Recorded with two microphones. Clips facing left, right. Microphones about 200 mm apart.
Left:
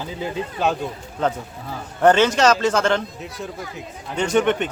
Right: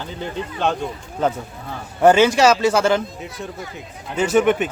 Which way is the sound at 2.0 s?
10° right (ahead or behind).